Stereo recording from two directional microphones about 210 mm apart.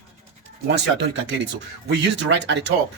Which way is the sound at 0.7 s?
55° right (ahead or behind).